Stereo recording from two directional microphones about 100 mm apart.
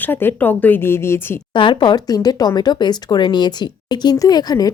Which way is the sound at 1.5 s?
55° left (ahead or behind).